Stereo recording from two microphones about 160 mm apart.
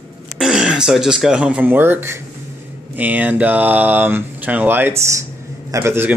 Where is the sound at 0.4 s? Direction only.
5° right (ahead or behind).